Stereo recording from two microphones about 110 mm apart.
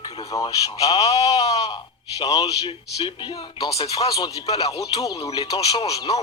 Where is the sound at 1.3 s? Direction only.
60° left (ahead or behind).